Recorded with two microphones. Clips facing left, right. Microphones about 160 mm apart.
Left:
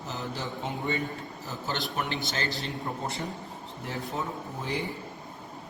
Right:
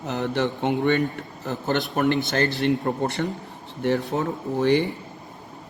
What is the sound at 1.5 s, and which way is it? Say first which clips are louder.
Speech: right 9 dB; 60° right (ahead or behind).